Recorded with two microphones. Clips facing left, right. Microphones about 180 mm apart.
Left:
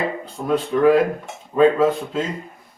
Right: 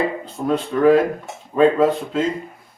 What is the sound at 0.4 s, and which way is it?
Speech, 5° left (ahead or behind).